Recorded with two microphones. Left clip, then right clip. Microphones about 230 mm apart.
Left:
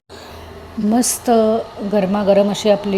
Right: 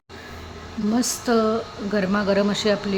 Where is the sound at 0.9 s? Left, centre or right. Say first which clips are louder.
Left 6 dB; centre.